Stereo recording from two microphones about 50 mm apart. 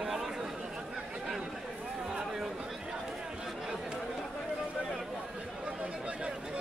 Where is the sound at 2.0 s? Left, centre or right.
Centre.